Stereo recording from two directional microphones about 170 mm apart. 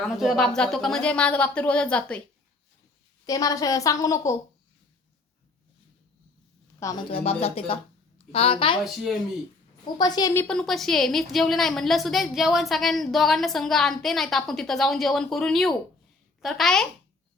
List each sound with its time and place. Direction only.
0.2 s speech: centre (ahead or behind)
3.2 s a woman's voice: 20° left (ahead or behind)
7.1 s speech: 35° left (ahead or behind)
9.8 s a woman's voice: 25° left (ahead or behind)
10.4 s a woman's voice: 5° left (ahead or behind)